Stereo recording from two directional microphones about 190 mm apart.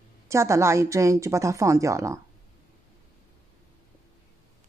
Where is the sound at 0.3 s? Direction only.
15° right (ahead or behind).